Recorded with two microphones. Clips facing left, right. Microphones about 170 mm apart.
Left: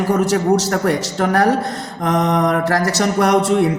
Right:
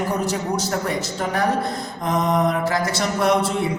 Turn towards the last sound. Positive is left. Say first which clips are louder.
# left 4 dB
turn(degrees=75)  # may be behind; listen again after turning